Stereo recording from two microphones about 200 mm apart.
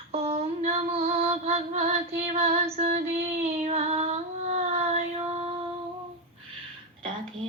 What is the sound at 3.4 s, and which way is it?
Child singing, 30° right (ahead or behind).